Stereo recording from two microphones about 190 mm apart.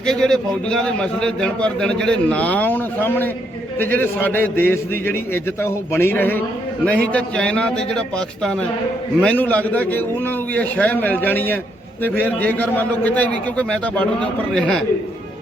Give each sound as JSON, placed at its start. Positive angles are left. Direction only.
{"t": 0.0, "sound": "a man's voice", "side_deg": 5}